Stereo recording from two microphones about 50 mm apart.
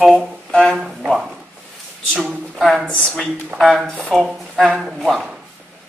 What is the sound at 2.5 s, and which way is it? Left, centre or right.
Speech, centre.